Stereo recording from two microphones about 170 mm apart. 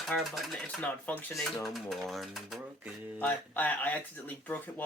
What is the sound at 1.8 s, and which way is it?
Speech, centre (ahead or behind).